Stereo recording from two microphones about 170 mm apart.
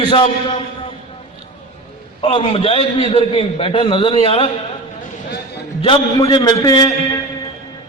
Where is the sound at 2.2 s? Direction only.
30° left (ahead or behind).